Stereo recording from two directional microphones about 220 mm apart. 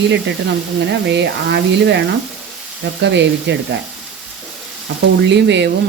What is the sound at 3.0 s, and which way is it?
Speech, 55° right (ahead or behind).